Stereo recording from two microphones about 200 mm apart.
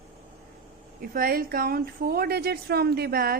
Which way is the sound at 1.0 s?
45° right (ahead or behind).